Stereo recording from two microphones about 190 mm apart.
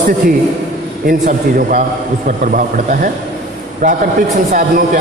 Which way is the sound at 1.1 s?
45° right (ahead or behind).